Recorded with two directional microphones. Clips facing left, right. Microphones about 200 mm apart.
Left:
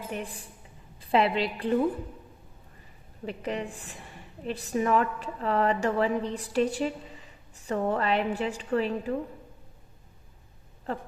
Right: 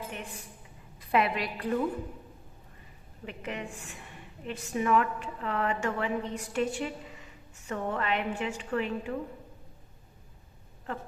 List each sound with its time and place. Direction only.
0.1 s a woman's voice: 35° left (ahead or behind)
3.2 s a woman's voice: 35° left (ahead or behind)